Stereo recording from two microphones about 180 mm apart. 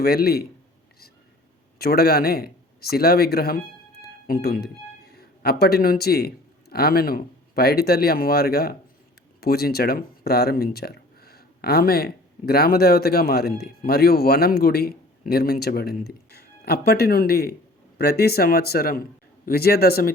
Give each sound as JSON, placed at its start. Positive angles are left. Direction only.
{"t": 0.0, "sound": "speech", "side_deg": 60}
{"t": 1.8, "sound": "speech", "side_deg": 60}